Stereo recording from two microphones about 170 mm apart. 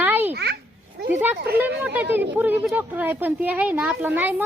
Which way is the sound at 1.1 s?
10° right (ahead or behind).